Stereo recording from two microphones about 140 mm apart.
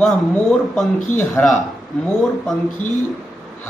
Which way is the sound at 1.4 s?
15° left (ahead or behind).